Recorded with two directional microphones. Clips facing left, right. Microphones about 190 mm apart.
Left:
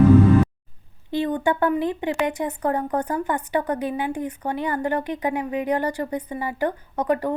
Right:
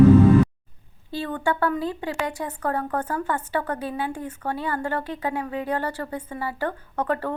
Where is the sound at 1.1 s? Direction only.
20° left (ahead or behind).